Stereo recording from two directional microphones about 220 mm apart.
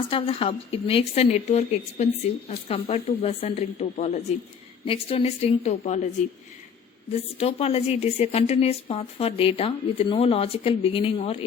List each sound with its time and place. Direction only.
0.1 s a woman's voice: 25° left (ahead or behind)
7.3 s a woman's voice: 30° left (ahead or behind)